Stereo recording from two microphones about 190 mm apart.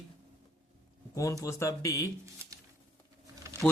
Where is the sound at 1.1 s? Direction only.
15° left (ahead or behind).